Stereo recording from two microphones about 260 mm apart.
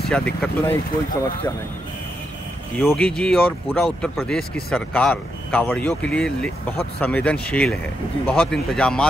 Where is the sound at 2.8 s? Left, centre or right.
Centre.